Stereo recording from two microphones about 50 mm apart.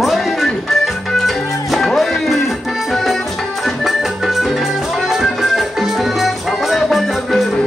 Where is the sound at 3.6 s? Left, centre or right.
Centre.